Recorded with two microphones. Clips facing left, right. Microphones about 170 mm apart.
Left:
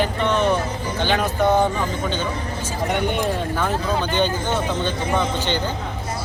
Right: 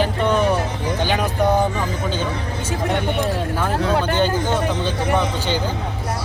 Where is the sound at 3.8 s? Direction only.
70° right (ahead or behind).